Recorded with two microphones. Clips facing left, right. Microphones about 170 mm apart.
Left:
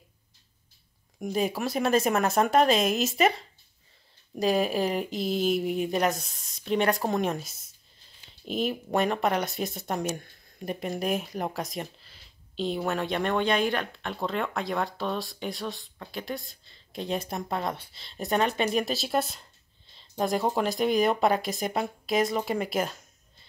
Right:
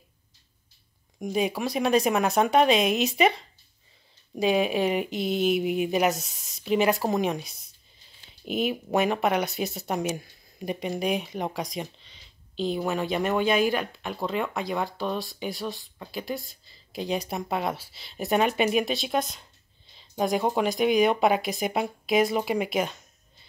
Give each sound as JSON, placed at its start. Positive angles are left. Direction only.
{"t": 1.2, "sound": "speech", "side_deg": 0}